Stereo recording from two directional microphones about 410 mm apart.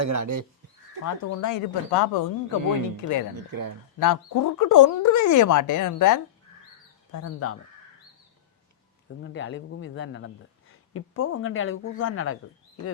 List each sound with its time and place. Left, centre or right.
0.0 s speech: right
1.0 s speech: left
3.3 s speech: right
4.0 s speech: left
9.2 s speech: left